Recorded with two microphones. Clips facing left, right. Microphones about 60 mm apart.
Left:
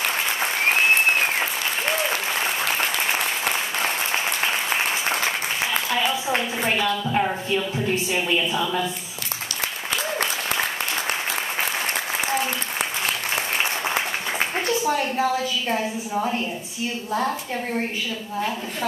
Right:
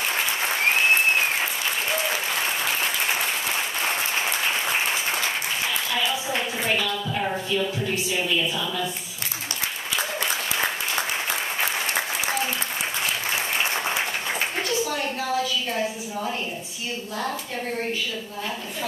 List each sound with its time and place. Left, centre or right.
6.2 s speech: left
15.7 s a woman's voice: left